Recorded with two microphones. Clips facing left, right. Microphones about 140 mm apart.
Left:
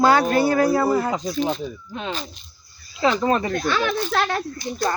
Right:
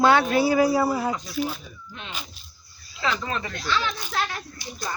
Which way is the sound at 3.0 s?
35° left (ahead or behind).